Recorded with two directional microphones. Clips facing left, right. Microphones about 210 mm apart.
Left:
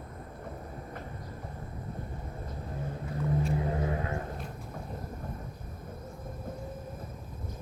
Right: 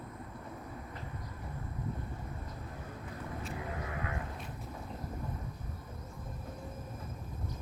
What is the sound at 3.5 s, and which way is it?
Vehicle, 30° left (ahead or behind).